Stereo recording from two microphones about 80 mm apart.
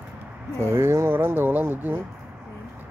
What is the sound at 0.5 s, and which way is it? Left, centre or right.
Speech, right.